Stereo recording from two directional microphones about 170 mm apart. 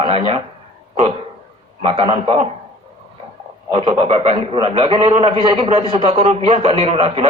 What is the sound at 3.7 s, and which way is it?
A man's voice, 35° right (ahead or behind).